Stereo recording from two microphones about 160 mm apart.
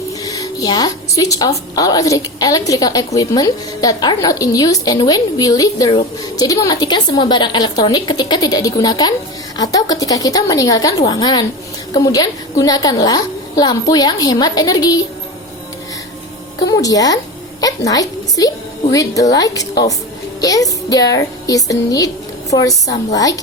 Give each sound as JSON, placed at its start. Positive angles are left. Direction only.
{"t": 0.2, "sound": "a woman's voice", "side_deg": 20}
{"t": 16.6, "sound": "a woman's voice", "side_deg": 20}